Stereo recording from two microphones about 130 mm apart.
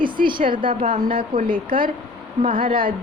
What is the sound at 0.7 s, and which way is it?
Speech, 90° right.